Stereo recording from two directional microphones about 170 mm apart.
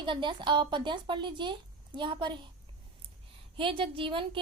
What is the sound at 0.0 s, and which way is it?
A woman's voice, 30° right (ahead or behind).